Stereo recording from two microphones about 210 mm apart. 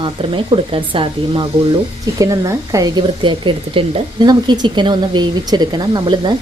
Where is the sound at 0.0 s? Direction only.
25° right (ahead or behind).